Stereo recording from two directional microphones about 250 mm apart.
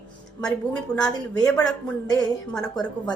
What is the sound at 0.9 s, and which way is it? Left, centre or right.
Speech, centre.